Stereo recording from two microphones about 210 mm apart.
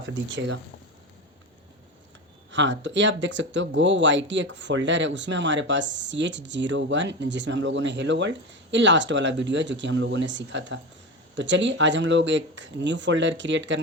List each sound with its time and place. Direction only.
0.0 s speech: 60° right (ahead or behind)
2.5 s speech: 60° right (ahead or behind)